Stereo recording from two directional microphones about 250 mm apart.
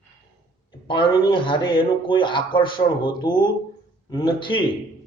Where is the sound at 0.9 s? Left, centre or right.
Centre.